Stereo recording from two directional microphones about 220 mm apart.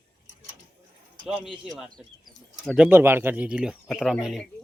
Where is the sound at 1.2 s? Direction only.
Centre (ahead or behind).